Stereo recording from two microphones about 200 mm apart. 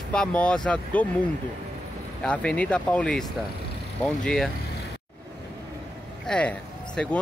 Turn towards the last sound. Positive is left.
turn(degrees=5)  # may be behind; listen again after turning